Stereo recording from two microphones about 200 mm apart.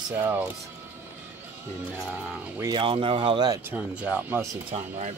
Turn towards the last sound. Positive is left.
turn(degrees=-35)  # may be behind; listen again after turning